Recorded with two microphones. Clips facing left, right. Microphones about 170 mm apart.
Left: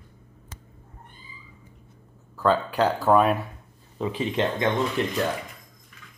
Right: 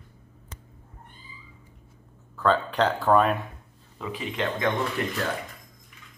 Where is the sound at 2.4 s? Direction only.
10° left (ahead or behind).